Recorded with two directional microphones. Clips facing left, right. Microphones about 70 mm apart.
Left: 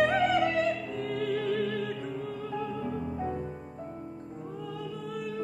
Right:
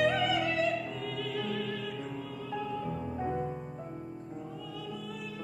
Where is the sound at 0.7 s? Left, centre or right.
Centre.